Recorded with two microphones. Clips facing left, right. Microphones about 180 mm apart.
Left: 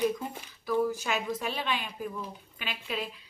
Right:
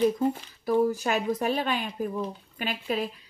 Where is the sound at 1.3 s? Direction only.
45° right (ahead or behind).